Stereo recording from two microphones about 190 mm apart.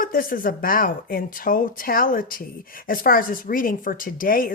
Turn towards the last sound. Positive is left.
turn(degrees=50)  # may be behind; listen again after turning